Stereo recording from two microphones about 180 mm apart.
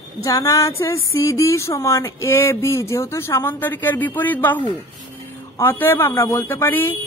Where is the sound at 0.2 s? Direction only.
20° left (ahead or behind).